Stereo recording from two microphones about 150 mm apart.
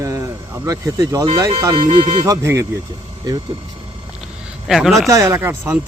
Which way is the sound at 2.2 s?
20° right (ahead or behind).